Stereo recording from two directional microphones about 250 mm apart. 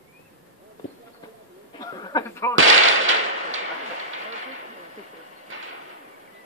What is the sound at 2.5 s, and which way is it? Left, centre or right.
Firecracker, right.